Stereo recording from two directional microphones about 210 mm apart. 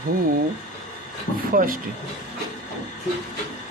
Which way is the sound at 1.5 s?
40° right (ahead or behind).